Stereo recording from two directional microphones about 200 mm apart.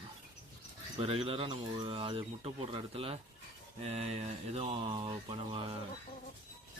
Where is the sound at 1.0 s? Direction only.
30° right (ahead or behind).